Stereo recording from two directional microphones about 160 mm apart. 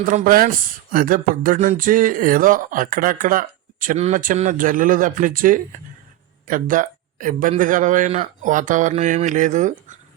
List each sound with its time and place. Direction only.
0.0 s speech: 55° right (ahead or behind)